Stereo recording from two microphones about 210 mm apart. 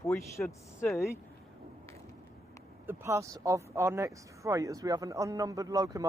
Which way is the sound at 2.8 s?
10° right (ahead or behind).